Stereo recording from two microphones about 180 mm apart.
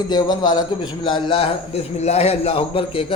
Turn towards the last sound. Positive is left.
turn(degrees=30)  # may be behind; listen again after turning